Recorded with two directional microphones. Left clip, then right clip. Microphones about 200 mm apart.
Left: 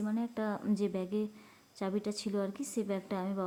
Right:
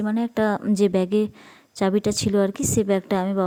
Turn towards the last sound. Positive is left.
turn(degrees=-40)  # may be behind; listen again after turning